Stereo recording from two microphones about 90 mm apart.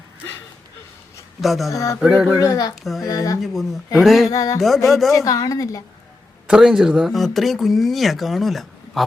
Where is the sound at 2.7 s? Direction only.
Centre (ahead or behind).